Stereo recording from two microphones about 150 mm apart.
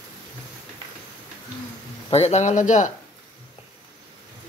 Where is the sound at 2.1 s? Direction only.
45° left (ahead or behind).